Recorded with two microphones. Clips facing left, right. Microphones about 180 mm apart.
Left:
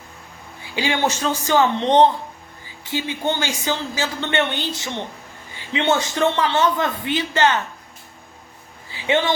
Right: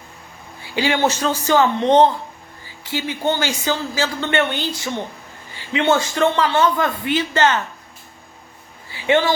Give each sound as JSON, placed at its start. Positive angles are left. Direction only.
{"t": 0.6, "sound": "a woman's voice", "side_deg": 20}
{"t": 5.9, "sound": "a woman's voice", "side_deg": 20}
{"t": 8.9, "sound": "a sound", "side_deg": 20}